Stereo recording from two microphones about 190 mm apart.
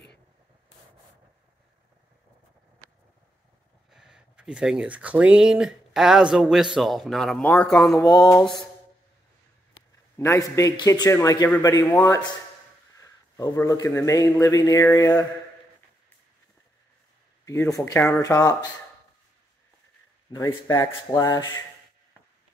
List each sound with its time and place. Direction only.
3.9 s speech: 5° right (ahead or behind)
8.0 s a man's voice: 20° left (ahead or behind)
8.4 s speech: centre (ahead or behind)
10.1 s a man's voice: 15° left (ahead or behind)
13.0 s a sound: 20° left (ahead or behind)
13.6 s a man's voice: 15° left (ahead or behind)
17.5 s a man's voice: 15° left (ahead or behind)
20.3 s a man's voice: 20° left (ahead or behind)